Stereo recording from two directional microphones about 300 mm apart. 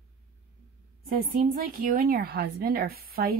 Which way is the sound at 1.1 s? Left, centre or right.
Right.